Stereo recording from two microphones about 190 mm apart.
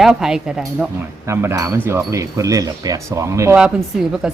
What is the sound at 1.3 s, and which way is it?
Speech, 15° right (ahead or behind).